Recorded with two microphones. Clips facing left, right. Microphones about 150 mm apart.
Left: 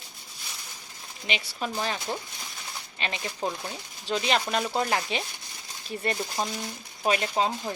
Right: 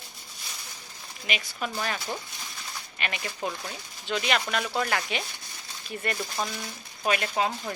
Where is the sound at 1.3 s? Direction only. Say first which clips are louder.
Left 1 dB; 30° left (ahead or behind).